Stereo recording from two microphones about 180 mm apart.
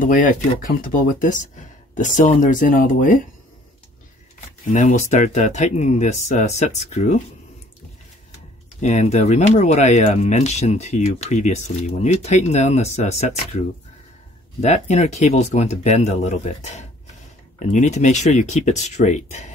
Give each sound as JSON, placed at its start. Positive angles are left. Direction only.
{"t": 0.0, "sound": "speech", "side_deg": 50}
{"t": 4.7, "sound": "speech", "side_deg": 45}
{"t": 8.8, "sound": "speech", "side_deg": 40}
{"t": 14.6, "sound": "speech", "side_deg": 40}